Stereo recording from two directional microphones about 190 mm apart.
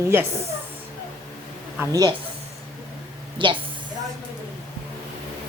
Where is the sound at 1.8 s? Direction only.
20° right (ahead or behind).